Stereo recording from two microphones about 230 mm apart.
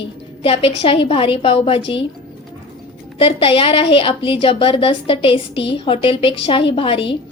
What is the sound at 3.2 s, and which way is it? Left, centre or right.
A woman's voice, left.